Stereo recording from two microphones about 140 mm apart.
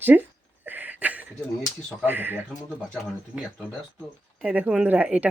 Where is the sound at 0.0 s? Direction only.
15° right (ahead or behind).